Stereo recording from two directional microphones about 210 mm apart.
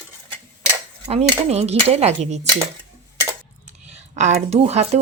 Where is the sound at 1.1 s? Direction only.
30° right (ahead or behind).